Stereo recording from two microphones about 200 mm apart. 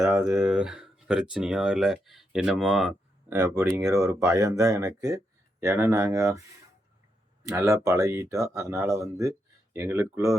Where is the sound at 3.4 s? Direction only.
15° right (ahead or behind).